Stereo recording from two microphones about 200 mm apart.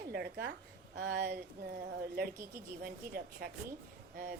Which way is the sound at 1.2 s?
50° right (ahead or behind).